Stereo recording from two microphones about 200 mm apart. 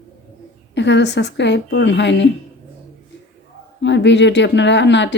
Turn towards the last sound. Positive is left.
turn(degrees=60)  # may be behind; listen again after turning